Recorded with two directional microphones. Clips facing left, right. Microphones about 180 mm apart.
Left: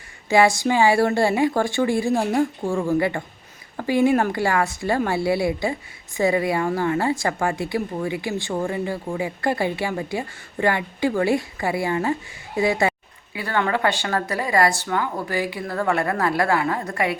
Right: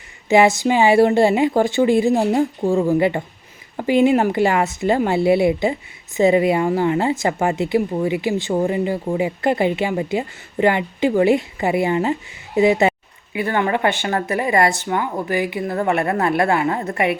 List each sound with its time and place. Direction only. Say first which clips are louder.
0.3 s speech: right 3 dB; 20° right (ahead or behind)